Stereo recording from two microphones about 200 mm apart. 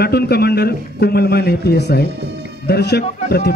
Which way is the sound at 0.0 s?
50° left (ahead or behind).